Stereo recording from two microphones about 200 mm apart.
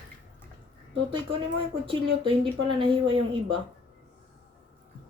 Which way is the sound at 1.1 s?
25° right (ahead or behind).